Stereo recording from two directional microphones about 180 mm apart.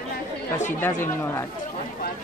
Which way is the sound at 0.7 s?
10° left (ahead or behind).